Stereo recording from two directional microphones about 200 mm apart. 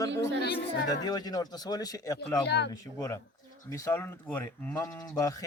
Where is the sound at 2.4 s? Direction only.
55° left (ahead or behind).